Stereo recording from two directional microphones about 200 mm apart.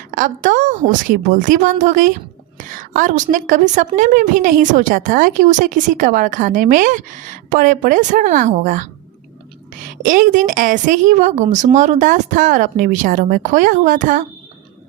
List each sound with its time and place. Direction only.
0.1 s a woman's voice: 40° right (ahead or behind)